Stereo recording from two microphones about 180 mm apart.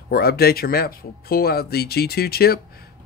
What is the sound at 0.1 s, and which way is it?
Speech, 60° left (ahead or behind).